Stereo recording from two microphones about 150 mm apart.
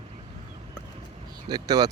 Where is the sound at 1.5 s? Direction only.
25° right (ahead or behind).